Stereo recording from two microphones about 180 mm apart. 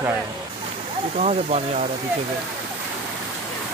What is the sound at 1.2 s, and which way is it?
Speech, 40° right (ahead or behind).